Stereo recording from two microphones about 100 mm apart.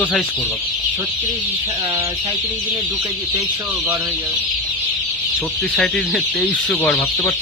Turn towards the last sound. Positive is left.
turn(degrees=10)  # may be behind; listen again after turning